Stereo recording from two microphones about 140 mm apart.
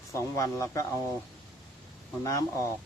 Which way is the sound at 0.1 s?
20° left (ahead or behind).